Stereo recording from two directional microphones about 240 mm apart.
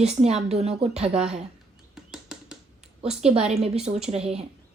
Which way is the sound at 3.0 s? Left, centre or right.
Right.